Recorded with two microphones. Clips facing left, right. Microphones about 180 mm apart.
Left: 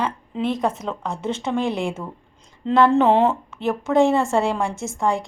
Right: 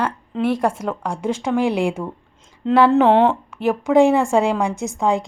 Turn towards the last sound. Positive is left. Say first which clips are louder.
# right 3 dB
turn(degrees=-20)  # may be behind; listen again after turning